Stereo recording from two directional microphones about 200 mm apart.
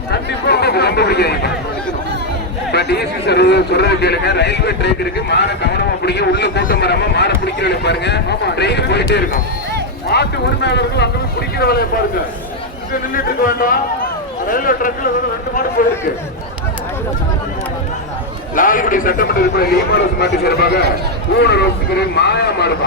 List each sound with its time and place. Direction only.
0.1 s chatter: 55° left (ahead or behind)
2.7 s chatter: 55° left (ahead or behind)
3.2 s a man's voice: 55° left (ahead or behind)
12.9 s a man's voice: 45° left (ahead or behind)
18.5 s a man's voice: 45° left (ahead or behind)